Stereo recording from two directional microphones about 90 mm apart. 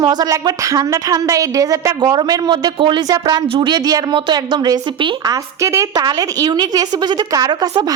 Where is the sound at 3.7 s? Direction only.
50° right (ahead or behind).